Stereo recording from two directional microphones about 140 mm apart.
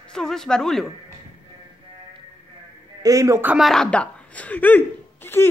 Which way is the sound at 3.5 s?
Centre (ahead or behind).